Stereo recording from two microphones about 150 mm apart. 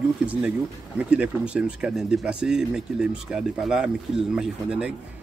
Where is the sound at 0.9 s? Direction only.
5° right (ahead or behind).